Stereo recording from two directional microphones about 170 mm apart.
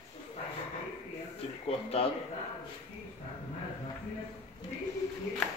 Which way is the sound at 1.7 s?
35° left (ahead or behind).